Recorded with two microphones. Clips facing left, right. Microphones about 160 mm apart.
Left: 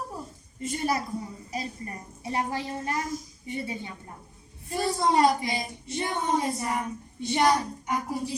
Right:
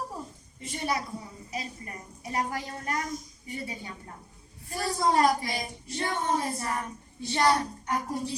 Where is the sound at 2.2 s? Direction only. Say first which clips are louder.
Left 2 dB; 25° left (ahead or behind).